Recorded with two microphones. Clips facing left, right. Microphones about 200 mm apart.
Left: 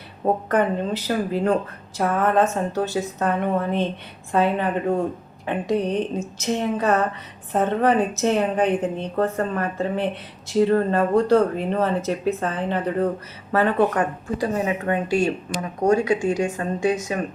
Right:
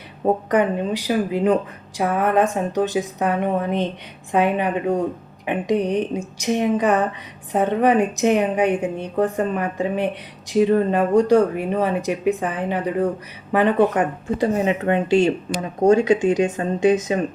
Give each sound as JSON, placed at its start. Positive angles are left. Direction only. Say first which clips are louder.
{"t": 0.4, "sound": "a woman's voice", "louder": "right 2 dB", "side_deg": -15}